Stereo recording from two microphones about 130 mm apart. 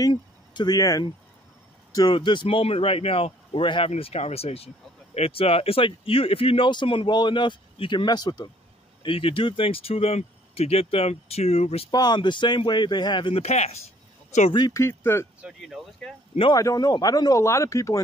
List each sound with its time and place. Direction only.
0.0 s speech: 35° left (ahead or behind)
2.4 s speech: 50° left (ahead or behind)
3.9 s speech: 55° left (ahead or behind); by 8.5 s 30° left (ahead or behind)
9.0 s speech: 45° left (ahead or behind)
11.9 s speech: 30° left (ahead or behind)
13.4 s speech: 55° left (ahead or behind)
14.7 s speech: 20° left (ahead or behind)
15.4 s speech: centre (ahead or behind)
16.5 s speech: 30° left (ahead or behind)